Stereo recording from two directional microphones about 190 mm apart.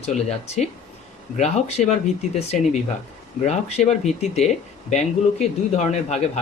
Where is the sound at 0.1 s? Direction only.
35° left (ahead or behind).